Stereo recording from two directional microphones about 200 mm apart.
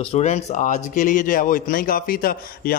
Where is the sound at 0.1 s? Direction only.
35° left (ahead or behind).